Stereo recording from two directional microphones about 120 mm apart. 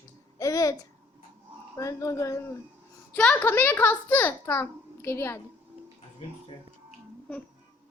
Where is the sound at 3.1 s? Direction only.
10° left (ahead or behind).